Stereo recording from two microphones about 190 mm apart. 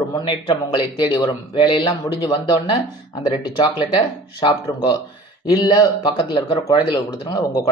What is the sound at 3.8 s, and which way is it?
Speech, 25° left (ahead or behind).